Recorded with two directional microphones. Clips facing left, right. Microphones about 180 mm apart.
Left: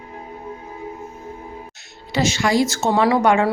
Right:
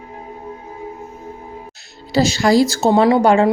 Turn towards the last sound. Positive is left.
turn(degrees=-30)  # may be behind; listen again after turning